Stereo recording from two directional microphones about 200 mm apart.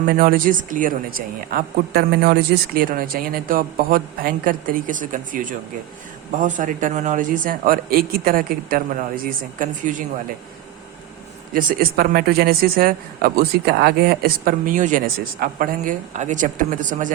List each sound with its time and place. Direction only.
0.1 s speech: 45° right (ahead or behind)
11.5 s speech: 50° right (ahead or behind)